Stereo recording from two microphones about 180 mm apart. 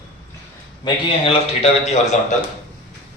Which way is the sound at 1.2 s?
35° left (ahead or behind).